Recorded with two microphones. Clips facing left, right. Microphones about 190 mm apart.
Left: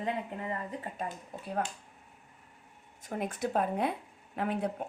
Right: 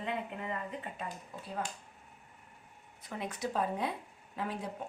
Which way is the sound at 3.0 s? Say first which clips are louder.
Left 4 dB; 45° left (ahead or behind).